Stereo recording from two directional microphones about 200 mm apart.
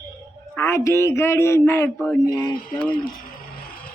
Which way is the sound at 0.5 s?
15° left (ahead or behind).